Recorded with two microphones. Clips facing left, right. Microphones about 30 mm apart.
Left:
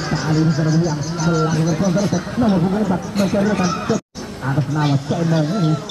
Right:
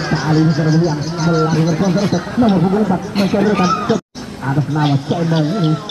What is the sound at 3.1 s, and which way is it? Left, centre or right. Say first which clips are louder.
Speech: right 4 dB; right.